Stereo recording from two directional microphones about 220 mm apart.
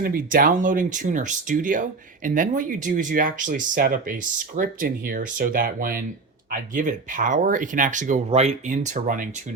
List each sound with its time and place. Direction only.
0.0 s speech: 40° right (ahead or behind)